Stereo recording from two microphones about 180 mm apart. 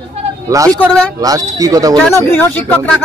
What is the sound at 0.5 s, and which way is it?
Speech, 20° right (ahead or behind).